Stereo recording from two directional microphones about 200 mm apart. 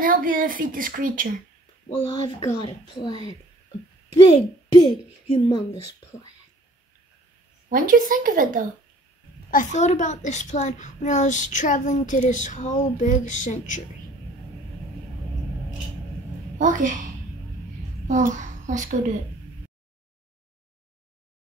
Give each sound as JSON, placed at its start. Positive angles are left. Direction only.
{"t": 0.0, "sound": "speech", "side_deg": -45}
{"t": 1.9, "sound": "a child's voice", "side_deg": 20}
{"t": 4.8, "sound": "a child's voice", "side_deg": 20}
{"t": 7.7, "sound": "speech", "side_deg": -45}
{"t": 9.5, "sound": "a child's voice", "side_deg": 40}
{"t": 16.5, "sound": "a woman's voice", "side_deg": -40}
{"t": 18.0, "sound": "a child's voice", "side_deg": -40}